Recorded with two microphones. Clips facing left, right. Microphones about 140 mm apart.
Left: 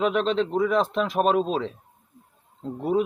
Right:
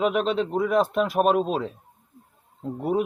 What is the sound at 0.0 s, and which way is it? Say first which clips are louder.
A man's voice: even; 5° right (ahead or behind).